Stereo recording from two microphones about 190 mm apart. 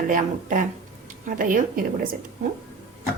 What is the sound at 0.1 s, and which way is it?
A woman's voice, 45° right (ahead or behind).